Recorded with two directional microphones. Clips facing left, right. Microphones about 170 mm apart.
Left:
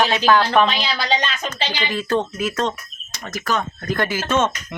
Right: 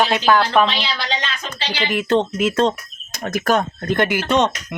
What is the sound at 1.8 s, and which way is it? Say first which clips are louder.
Speech: right 4 dB; 20° right (ahead or behind).